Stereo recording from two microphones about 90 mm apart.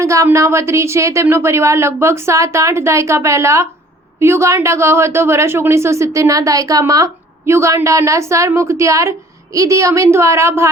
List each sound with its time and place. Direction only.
0.0 s a woman's voice: 35° right (ahead or behind)